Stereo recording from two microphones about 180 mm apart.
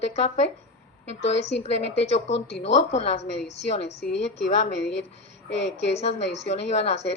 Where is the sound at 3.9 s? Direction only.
70° left (ahead or behind).